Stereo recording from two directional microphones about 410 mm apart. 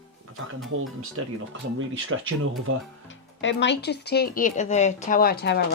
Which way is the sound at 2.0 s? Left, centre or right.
Right.